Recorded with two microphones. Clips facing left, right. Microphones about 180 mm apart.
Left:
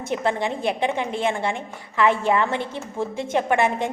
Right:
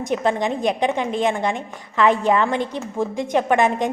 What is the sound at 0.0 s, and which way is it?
A woman's voice, 15° right (ahead or behind).